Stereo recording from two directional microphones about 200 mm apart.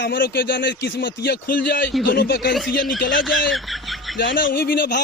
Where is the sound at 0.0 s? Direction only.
50° left (ahead or behind).